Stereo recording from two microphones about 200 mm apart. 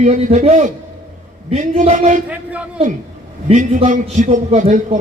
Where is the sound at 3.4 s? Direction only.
35° right (ahead or behind).